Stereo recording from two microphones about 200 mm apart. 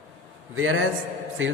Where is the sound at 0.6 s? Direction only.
85° right.